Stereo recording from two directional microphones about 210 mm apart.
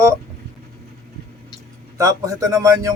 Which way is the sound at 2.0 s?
15° right (ahead or behind).